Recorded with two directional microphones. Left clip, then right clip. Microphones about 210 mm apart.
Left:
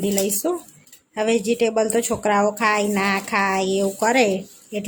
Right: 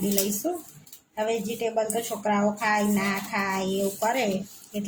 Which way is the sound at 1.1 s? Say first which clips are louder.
Left 8 dB; 50° left (ahead or behind).